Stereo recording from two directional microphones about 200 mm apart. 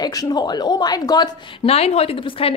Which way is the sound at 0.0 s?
20° left (ahead or behind).